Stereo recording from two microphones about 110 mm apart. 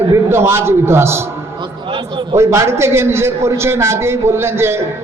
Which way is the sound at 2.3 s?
25° right (ahead or behind).